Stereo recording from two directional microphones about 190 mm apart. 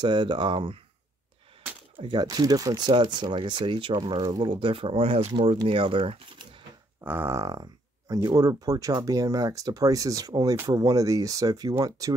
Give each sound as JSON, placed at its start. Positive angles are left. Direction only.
{"t": 0.0, "sound": "speech", "side_deg": -25}
{"t": 2.0, "sound": "speech", "side_deg": -25}
{"t": 7.0, "sound": "speech", "side_deg": -10}